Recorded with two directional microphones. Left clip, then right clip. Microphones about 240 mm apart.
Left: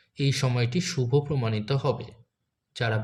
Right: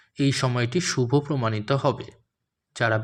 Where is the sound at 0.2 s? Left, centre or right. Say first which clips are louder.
Right 4 dB; right.